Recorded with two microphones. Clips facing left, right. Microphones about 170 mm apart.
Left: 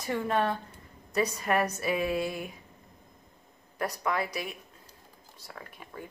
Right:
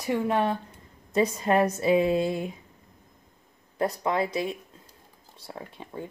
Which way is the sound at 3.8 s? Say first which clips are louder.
Right 5 dB; 25° right (ahead or behind).